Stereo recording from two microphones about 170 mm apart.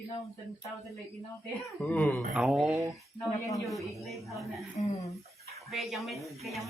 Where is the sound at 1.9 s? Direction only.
10° left (ahead or behind).